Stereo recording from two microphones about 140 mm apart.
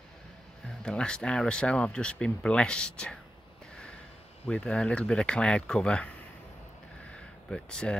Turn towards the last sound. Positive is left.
turn(degrees=5)  # may be behind; listen again after turning